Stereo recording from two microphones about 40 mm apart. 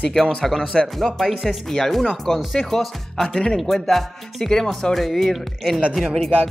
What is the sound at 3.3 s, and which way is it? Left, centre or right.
Speech, left.